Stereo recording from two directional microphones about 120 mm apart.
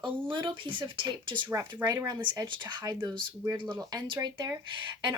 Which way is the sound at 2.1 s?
35° right (ahead or behind).